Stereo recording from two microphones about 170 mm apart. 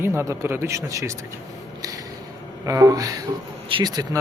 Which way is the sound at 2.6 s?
20° right (ahead or behind).